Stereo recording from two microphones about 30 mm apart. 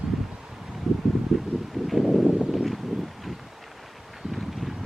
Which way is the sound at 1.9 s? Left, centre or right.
Centre.